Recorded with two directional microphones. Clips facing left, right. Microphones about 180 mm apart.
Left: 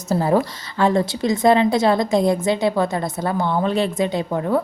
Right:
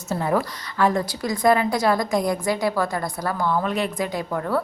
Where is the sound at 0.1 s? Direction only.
30° left (ahead or behind).